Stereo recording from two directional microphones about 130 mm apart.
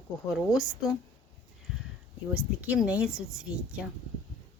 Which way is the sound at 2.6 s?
10° right (ahead or behind).